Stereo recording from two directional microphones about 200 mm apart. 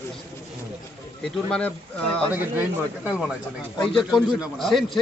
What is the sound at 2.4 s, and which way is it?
A man's voice, 5° right (ahead or behind).